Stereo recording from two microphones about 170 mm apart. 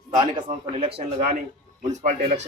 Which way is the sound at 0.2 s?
30° right (ahead or behind).